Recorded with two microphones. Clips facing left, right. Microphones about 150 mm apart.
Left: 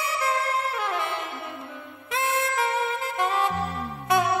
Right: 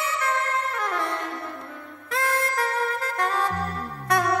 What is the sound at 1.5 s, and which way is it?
Music, centre (ahead or behind).